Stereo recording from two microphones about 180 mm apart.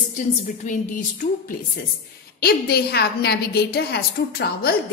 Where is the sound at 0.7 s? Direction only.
40° left (ahead or behind).